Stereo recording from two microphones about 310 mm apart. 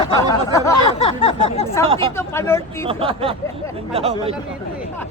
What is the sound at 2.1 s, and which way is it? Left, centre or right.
Speech, centre.